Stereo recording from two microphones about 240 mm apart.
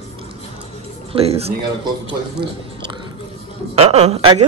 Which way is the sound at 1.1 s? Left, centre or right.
Right.